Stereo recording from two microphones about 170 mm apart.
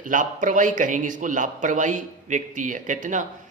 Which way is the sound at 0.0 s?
50° right (ahead or behind).